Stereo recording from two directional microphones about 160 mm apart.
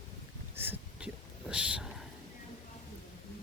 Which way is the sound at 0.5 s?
15° right (ahead or behind).